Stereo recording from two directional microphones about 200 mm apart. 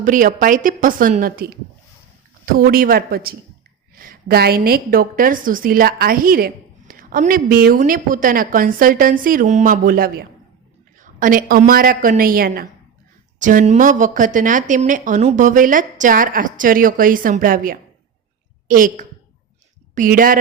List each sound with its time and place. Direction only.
0.0 s a woman's voice: 40° right (ahead or behind)